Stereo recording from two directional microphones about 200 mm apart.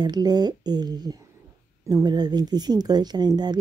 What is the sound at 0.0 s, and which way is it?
Speech, 20° right (ahead or behind).